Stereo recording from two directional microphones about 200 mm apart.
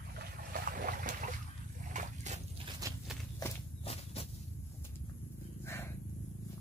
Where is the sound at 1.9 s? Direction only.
35° right (ahead or behind).